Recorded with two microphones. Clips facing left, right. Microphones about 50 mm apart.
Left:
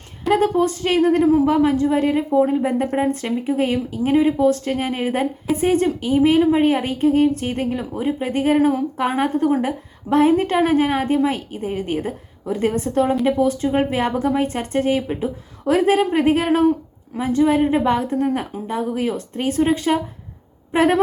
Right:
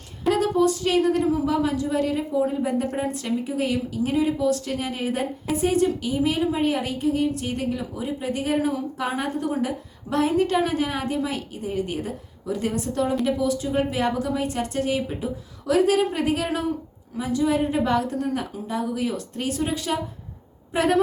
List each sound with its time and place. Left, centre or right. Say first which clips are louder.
0.3 s a woman's voice: left 4 dB; left